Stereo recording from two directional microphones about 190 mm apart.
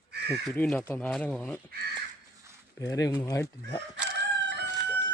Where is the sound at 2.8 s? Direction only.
20° left (ahead or behind).